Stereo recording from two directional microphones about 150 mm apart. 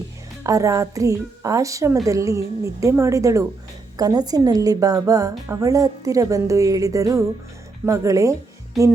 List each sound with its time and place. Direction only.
0.4 s a woman's voice: 20° right (ahead or behind)